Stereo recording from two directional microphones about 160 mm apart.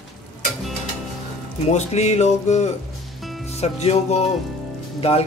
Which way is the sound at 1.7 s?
45° left (ahead or behind).